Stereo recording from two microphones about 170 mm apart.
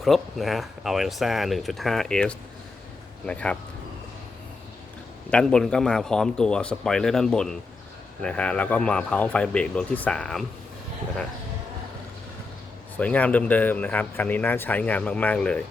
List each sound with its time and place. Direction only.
0.0 s speech: centre (ahead or behind)
5.3 s speech: 5° left (ahead or behind)
13.0 s speech: 10° left (ahead or behind)